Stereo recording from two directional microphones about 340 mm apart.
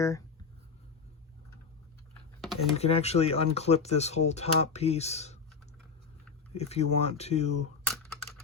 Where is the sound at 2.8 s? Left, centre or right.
Centre.